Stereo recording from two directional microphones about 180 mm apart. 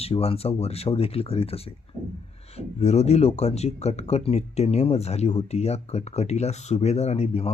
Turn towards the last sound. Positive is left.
turn(degrees=35)  # may be behind; listen again after turning